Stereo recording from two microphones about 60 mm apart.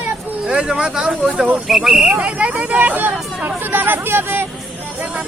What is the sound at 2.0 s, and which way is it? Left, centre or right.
Speech, right.